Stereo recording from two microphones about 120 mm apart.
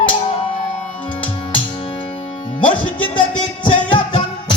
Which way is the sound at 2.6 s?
45° left (ahead or behind).